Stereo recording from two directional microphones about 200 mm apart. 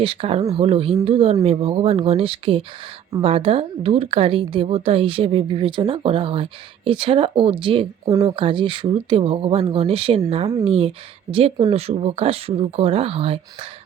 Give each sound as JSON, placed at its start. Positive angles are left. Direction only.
{"t": 0.0, "sound": "a woman's voice", "side_deg": -25}